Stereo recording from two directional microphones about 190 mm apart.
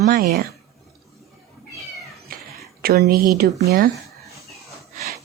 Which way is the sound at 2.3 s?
50° right (ahead or behind).